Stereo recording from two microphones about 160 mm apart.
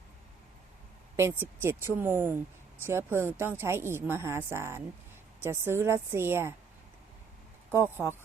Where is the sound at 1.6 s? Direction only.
15° right (ahead or behind).